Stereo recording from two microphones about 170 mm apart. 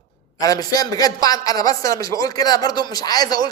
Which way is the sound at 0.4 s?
20° left (ahead or behind).